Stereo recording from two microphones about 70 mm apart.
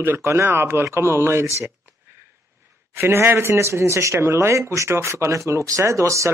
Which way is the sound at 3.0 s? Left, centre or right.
Right.